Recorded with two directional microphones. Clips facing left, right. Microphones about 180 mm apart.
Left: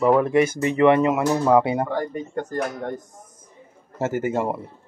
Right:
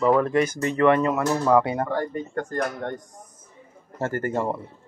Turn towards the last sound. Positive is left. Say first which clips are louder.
# left 2 dB
turn(degrees=10)  # may be behind; listen again after turning